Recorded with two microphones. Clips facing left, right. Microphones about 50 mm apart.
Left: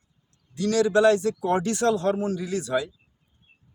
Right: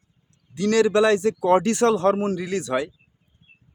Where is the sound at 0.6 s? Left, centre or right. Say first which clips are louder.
Right 1 dB; right.